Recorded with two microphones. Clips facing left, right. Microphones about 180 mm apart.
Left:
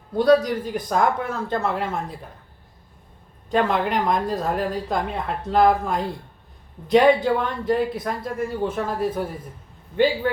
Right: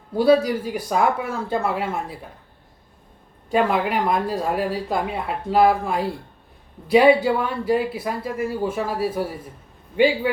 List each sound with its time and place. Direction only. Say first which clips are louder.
0.1 s a woman's voice: even; 10° right (ahead or behind)
3.5 s a woman's voice: right 1 dB; 5° right (ahead or behind)